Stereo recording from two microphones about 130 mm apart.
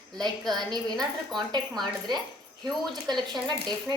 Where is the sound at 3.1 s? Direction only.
35° right (ahead or behind).